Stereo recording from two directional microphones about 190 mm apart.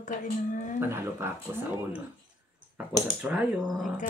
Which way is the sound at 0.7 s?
10° right (ahead or behind).